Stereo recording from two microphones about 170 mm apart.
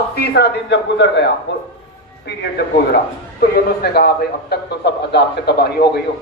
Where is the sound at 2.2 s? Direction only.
70° left (ahead or behind).